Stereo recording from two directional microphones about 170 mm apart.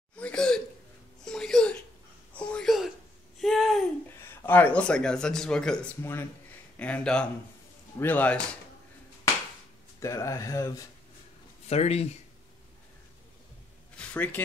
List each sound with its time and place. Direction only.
0.2 s hiccup: 5° left (ahead or behind)
1.2 s a sound: 5° left (ahead or behind)
4.3 s speech: 15° left (ahead or behind)
9.9 s speech: 20° left (ahead or behind)
11.6 s speech: 40° left (ahead or behind)
13.9 s a sound: 10° left (ahead or behind)